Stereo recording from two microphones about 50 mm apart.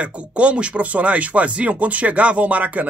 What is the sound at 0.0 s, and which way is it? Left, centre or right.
Speech, right.